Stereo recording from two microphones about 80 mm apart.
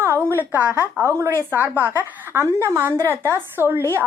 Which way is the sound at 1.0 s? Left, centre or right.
Right.